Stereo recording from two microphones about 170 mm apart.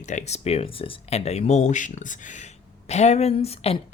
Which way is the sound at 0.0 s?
45° left (ahead or behind).